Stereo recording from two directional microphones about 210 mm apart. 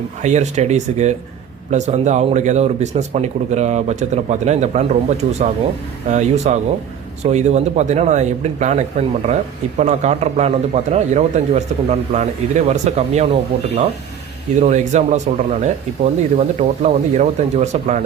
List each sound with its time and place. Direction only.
0.2 s speech: 35° right (ahead or behind)